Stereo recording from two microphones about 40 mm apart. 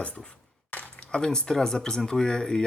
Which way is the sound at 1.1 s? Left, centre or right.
Centre.